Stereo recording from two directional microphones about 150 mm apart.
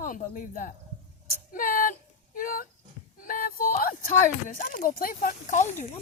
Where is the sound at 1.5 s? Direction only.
70° left (ahead or behind).